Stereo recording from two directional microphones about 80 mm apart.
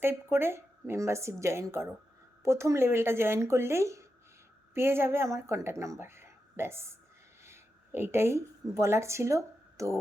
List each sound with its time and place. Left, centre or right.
0.0 s speech: right
7.4 s a sound: right
8.7 s speech: right